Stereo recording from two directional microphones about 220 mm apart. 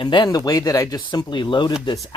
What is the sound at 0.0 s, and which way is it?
Speech, 20° left (ahead or behind).